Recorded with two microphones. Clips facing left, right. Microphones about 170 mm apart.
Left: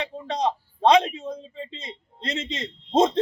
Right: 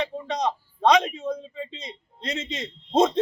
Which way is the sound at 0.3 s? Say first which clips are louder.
Left 1 dB; 30° left (ahead or behind).